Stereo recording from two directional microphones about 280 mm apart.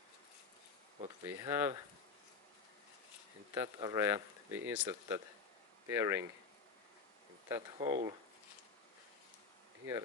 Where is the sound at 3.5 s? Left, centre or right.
Centre.